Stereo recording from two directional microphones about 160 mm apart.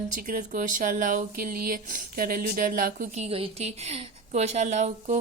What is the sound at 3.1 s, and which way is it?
A woman's voice, 40° right (ahead or behind).